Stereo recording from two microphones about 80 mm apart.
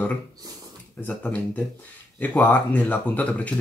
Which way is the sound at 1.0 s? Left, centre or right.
Centre.